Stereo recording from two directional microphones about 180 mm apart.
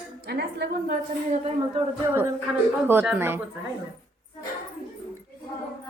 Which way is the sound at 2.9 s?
10° right (ahead or behind).